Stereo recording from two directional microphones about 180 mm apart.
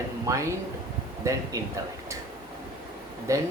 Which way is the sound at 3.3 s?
15° right (ahead or behind).